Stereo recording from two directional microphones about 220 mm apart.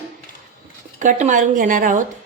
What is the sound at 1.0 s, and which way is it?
A woman's voice, 35° right (ahead or behind).